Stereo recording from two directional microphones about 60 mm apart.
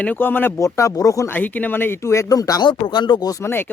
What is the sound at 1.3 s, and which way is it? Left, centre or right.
Speech, left.